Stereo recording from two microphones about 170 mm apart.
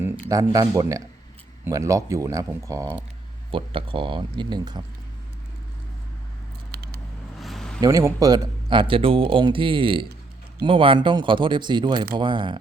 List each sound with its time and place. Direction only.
0.0 s speech: 20° right (ahead or behind)
3.5 s speech: 30° right (ahead or behind)
6.7 s a sound: 75° right (ahead or behind)
7.3 s vehicle: centre (ahead or behind)
7.8 s speech: 20° right (ahead or behind)